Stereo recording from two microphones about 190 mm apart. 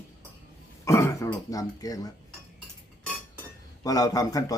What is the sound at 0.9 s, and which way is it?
Throat clearing, 15° left (ahead or behind).